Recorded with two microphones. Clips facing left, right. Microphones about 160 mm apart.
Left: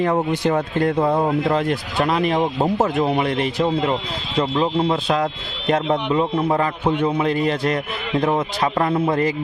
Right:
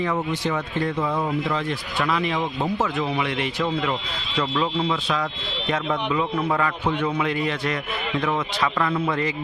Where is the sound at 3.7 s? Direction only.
30° left (ahead or behind).